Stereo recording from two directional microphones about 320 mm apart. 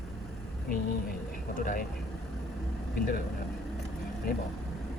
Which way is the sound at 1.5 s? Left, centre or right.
Left.